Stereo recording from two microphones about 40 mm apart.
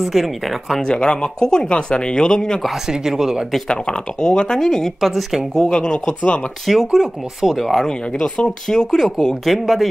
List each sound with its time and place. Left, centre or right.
0.0 s speech: centre
0.8 s speech: left
2.9 s speech: centre
3.6 s speech: left
4.6 s speech: centre
6.6 s speech: centre
7.8 s speech: centre
9.2 s speech: centre